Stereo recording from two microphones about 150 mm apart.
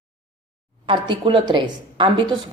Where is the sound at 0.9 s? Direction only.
30° right (ahead or behind).